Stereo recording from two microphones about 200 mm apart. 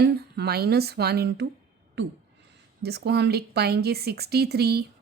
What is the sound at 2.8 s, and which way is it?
A woman's voice, 55° right (ahead or behind).